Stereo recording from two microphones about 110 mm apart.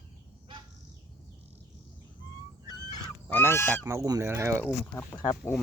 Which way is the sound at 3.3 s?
20° left (ahead or behind).